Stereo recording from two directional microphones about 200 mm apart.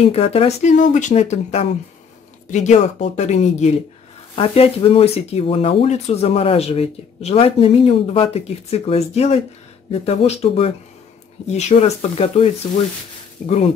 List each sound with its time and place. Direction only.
0.0 s speech: 30° left (ahead or behind)